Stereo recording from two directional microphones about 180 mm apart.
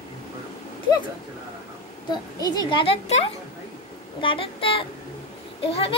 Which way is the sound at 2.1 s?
25° left (ahead or behind).